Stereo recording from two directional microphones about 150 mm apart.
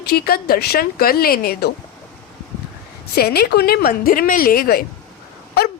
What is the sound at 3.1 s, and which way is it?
A woman's voice, 90° left.